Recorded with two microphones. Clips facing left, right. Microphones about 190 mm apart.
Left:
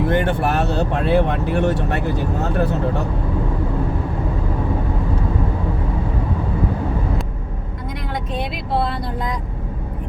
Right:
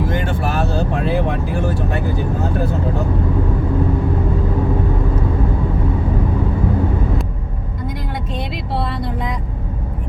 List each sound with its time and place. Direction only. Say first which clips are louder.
0.0 s speech: left 2 dB; 65° left (ahead or behind)